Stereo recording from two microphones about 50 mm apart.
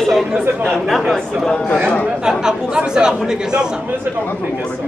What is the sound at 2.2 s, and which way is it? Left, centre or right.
Speech, centre.